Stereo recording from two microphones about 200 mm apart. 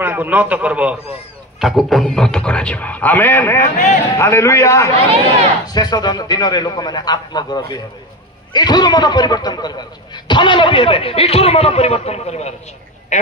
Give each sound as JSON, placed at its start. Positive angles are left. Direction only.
{"t": 0.0, "sound": "a man's voice", "side_deg": -10}
{"t": 3.7, "sound": "speech", "side_deg": 35}
{"t": 4.2, "sound": "a man's voice", "side_deg": 15}
{"t": 4.9, "sound": "speech", "side_deg": -30}
{"t": 5.7, "sound": "a man's voice", "side_deg": 20}
{"t": 13.1, "sound": "duck", "side_deg": 35}